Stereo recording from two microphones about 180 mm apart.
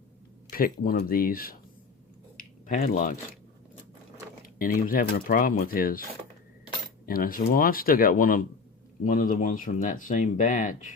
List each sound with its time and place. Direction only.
0.5 s speech: 55° left (ahead or behind)
2.4 s a sound: 45° left (ahead or behind)
4.4 s speech: 50° left (ahead or behind)